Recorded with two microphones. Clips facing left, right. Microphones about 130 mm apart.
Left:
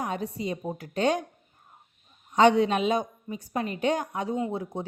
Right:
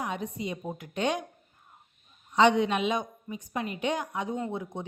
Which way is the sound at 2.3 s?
40° left (ahead or behind).